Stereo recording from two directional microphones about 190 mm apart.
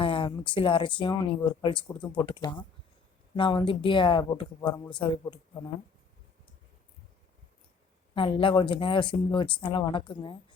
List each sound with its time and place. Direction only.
0.0 s speech: 25° left (ahead or behind)
8.1 s speech: 25° left (ahead or behind)